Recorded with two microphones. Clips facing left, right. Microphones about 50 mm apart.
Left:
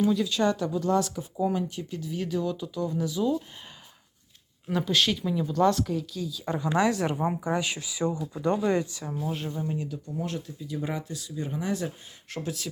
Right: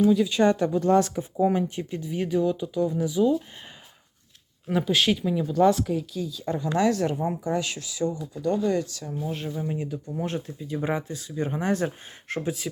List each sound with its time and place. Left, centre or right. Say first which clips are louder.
0.0 s speech: right 4 dB; centre
0.3 s speech: right 4 dB; right
0.6 s speech: right 5 dB; right; by 3.3 s centre
4.7 s speech: right 3 dB; centre
6.4 s speech: right 1 dB; centre
8.4 s speech: right 1 dB; left
9.1 s speech: right 1 dB; centre
9.7 s speech: right 2 dB; right
12.4 s speech: right 4 dB; centre